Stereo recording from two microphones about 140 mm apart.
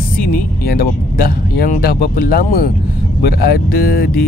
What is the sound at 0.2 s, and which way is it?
Speech, 90° left.